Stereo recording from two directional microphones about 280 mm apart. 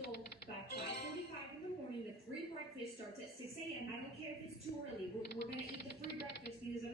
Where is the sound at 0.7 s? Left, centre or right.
Left.